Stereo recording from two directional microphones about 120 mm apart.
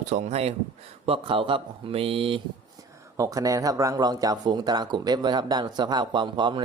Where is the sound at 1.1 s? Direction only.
45° right (ahead or behind).